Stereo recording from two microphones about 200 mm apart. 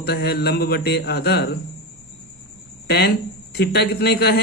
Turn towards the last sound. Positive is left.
turn(degrees=55)  # may be behind; listen again after turning